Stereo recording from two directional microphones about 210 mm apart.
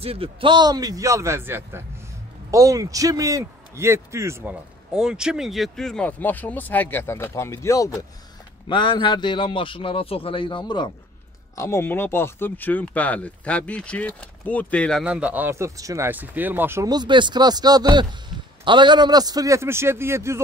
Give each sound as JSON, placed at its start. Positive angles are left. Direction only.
{"t": 0.0, "sound": "a man's voice", "side_deg": -25}